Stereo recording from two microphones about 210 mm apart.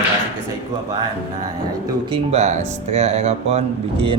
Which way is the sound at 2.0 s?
25° right (ahead or behind).